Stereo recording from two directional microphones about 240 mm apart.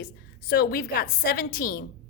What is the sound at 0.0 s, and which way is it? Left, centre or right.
A woman's voice, left.